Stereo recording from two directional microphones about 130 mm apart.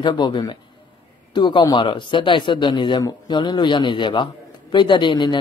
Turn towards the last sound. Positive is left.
turn(degrees=35)  # may be behind; listen again after turning